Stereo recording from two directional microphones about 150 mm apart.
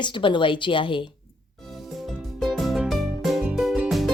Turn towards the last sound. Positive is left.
turn(degrees=0)  # may be behind; listen again after turning